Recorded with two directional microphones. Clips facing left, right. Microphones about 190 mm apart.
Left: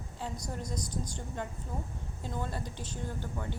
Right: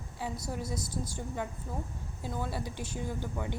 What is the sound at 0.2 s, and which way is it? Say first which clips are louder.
A woman's voice: right 2 dB; 10° right (ahead or behind).